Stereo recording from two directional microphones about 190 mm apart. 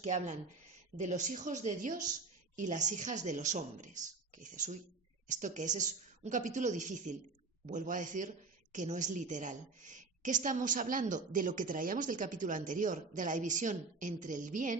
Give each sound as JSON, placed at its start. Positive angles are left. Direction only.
{"t": 0.0, "sound": "a woman's voice", "side_deg": -40}